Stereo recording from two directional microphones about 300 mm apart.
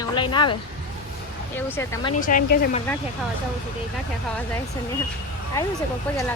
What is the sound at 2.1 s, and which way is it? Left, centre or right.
Speech, left.